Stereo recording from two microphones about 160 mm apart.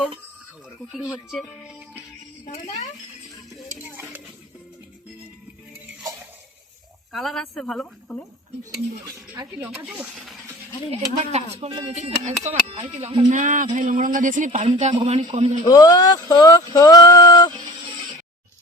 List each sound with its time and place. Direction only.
0.9 s speech: 5° right (ahead or behind)
3.8 s a sound: 10° right (ahead or behind)
7.1 s speech: centre (ahead or behind)
9.0 s speech: 15° right (ahead or behind)
10.9 s speech: 45° right (ahead or behind)
13.2 s speech: 50° right (ahead or behind)
15.6 s speech: 25° left (ahead or behind)